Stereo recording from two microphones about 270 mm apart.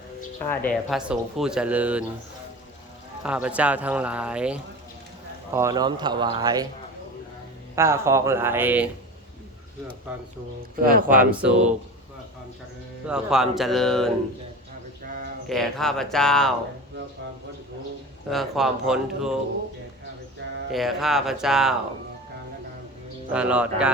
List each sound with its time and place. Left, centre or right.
0.3 s speech: centre
3.2 s speech: centre
7.8 s speech: centre
10.8 s speech: right
11.1 s speech: centre
13.1 s speech: centre
15.4 s speech: centre
18.3 s speech: centre
20.4 s speech: right
20.7 s speech: centre
23.3 s speech: centre